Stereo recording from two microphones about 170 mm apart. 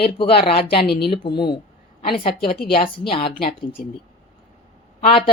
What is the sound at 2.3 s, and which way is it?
Speech, 60° left (ahead or behind).